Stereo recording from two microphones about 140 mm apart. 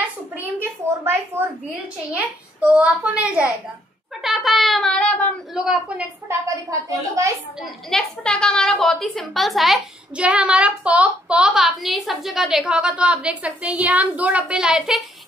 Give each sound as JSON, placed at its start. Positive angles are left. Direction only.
{"t": 0.8, "sound": "a child's voice", "side_deg": -20}
{"t": 5.5, "sound": "a child's voice", "side_deg": -5}
{"t": 6.2, "sound": "a woman's voice", "side_deg": -20}
{"t": 7.6, "sound": "a woman's voice", "side_deg": 5}